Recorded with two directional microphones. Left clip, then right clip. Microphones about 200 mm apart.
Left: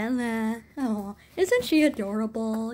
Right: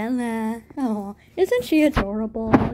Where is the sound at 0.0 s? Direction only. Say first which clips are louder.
Right 3 dB; centre (ahead or behind).